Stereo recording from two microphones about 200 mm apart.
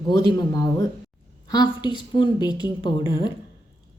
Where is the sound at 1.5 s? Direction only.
20° left (ahead or behind).